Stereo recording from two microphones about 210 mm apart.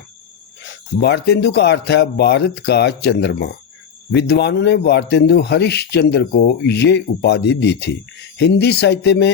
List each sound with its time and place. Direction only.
1.0 s a man's voice: 50° left (ahead or behind)